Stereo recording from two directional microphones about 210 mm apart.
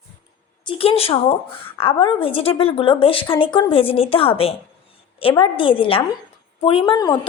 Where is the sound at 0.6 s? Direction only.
25° left (ahead or behind).